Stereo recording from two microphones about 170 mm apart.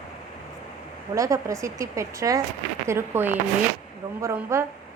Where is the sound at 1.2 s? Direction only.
20° right (ahead or behind).